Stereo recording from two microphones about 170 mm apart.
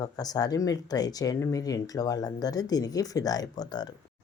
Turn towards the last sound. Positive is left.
turn(degrees=25)  # may be behind; listen again after turning